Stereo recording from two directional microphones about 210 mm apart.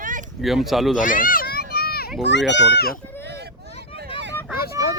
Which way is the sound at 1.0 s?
40° left (ahead or behind).